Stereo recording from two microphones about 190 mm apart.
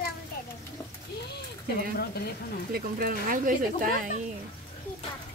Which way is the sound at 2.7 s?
50° right (ahead or behind).